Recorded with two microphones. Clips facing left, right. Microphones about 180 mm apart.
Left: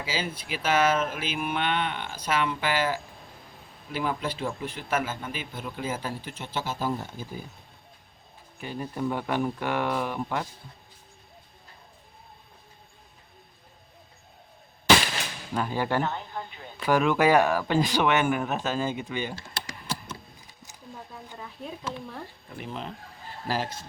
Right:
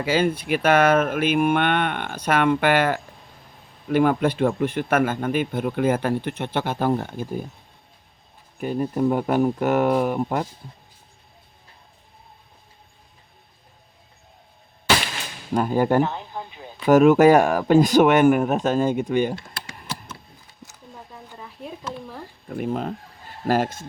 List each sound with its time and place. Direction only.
0.0 s speech: 60° right (ahead or behind)
8.6 s speech: 45° right (ahead or behind)
15.5 s speech: 45° right (ahead or behind)
16.0 s a sound: 15° right (ahead or behind)
16.8 s speech: 45° right (ahead or behind)
20.6 s a sound: 15° left (ahead or behind)
22.4 s speech: 50° right (ahead or behind)